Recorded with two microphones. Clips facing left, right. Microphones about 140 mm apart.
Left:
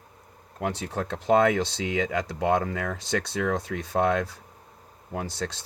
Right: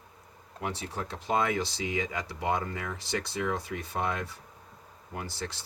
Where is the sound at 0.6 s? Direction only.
75° left (ahead or behind).